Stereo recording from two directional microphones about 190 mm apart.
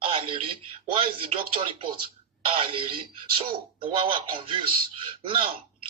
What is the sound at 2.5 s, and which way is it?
Speech, 25° right (ahead or behind).